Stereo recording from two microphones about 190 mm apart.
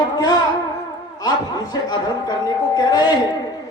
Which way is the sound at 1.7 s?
20° left (ahead or behind).